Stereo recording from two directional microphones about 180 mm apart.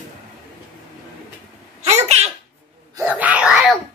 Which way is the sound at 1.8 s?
35° right (ahead or behind).